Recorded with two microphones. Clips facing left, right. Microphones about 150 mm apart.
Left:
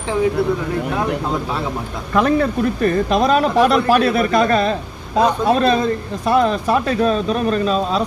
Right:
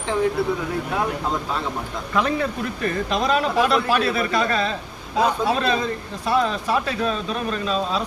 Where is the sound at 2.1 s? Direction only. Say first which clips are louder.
Left 7 dB; 50° left (ahead or behind).